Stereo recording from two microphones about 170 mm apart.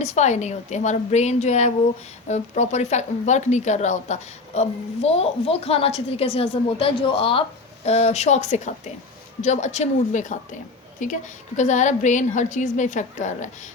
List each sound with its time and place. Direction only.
0.0 s a woman's voice: 40° left (ahead or behind)